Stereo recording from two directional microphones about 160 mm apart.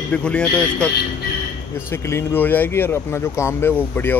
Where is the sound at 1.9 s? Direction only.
15° left (ahead or behind).